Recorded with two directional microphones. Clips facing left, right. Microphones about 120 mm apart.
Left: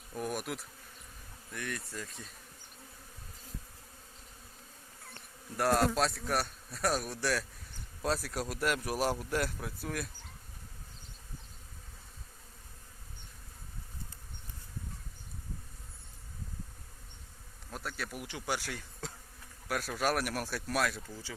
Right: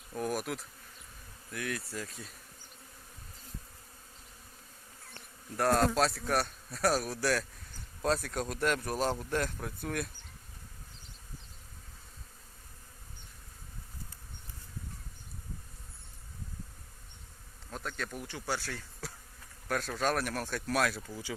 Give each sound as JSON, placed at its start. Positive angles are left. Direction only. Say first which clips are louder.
{"t": 0.1, "sound": "bee", "louder": "right 2 dB", "side_deg": 0}
{"t": 1.5, "sound": "a man's voice", "louder": "right 3 dB", "side_deg": 0}
{"t": 5.5, "sound": "a man's voice", "louder": "right 1 dB", "side_deg": 5}
{"t": 17.7, "sound": "speech", "louder": "right 1 dB", "side_deg": 5}
{"t": 19.6, "sound": "speech", "louder": "right 1 dB", "side_deg": 10}
{"t": 21.1, "sound": "speech", "louder": "right 4 dB", "side_deg": -15}